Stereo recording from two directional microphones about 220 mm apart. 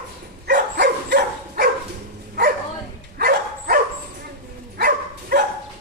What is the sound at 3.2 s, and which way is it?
Dog, 45° right (ahead or behind).